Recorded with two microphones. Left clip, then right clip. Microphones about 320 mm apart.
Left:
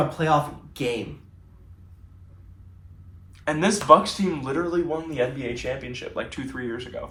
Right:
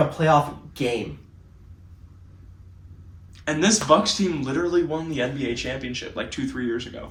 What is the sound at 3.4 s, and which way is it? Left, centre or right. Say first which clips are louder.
Speech: left 2 dB; centre.